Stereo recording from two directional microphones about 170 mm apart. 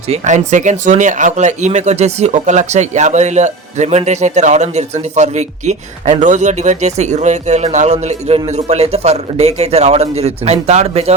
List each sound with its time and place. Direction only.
0.1 s speech: 45° right (ahead or behind)